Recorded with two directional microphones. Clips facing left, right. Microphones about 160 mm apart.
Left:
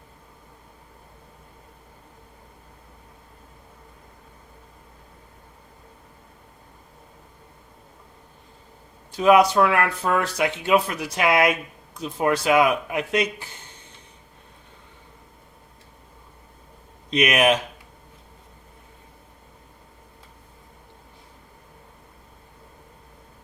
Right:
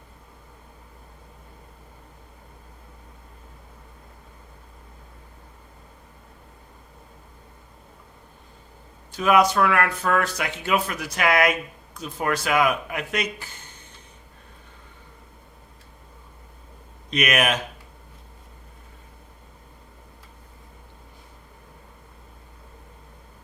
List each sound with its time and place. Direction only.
9.1 s speech: 25° left (ahead or behind)
17.1 s speech: 25° left (ahead or behind)